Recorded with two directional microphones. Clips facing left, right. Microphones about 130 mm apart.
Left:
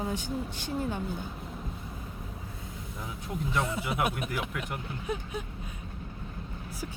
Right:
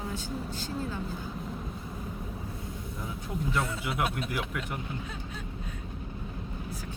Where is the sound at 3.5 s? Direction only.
20° left (ahead or behind).